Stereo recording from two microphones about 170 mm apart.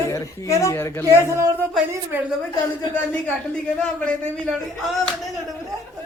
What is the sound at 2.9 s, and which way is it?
A man's voice, 10° left (ahead or behind).